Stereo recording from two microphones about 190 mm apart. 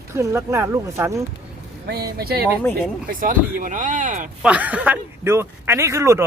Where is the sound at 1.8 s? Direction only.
55° right (ahead or behind).